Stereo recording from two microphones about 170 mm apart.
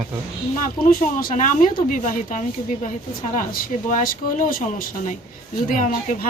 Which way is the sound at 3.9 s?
50° left (ahead or behind).